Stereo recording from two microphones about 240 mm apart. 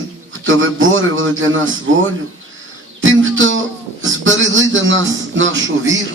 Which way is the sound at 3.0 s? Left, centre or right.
Right.